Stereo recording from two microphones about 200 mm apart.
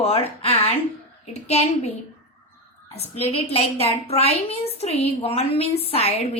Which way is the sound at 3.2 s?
30° left (ahead or behind).